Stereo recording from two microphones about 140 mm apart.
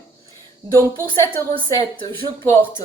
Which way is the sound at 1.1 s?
20° left (ahead or behind).